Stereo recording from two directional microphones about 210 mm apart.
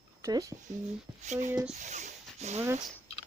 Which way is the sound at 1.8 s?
35° right (ahead or behind).